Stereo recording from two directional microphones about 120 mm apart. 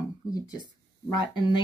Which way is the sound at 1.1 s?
40° left (ahead or behind).